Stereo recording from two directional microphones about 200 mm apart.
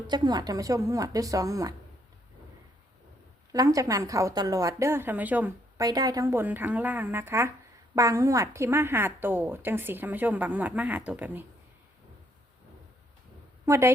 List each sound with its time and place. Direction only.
0.1 s a woman's voice: 20° right (ahead or behind)
3.5 s a woman's voice: 15° right (ahead or behind)
13.7 s a woman's voice: 15° right (ahead or behind)